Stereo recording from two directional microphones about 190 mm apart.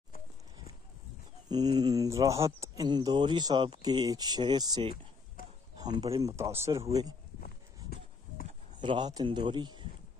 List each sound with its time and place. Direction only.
1.5 s speech: 20° right (ahead or behind)
5.4 s a sound: 50° left (ahead or behind)
5.8 s speech: 20° right (ahead or behind)
7.3 s livestock: 50° left (ahead or behind)
8.7 s speech: 25° right (ahead or behind)